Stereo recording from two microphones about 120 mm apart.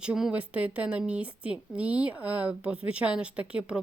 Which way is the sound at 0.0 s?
5° right (ahead or behind).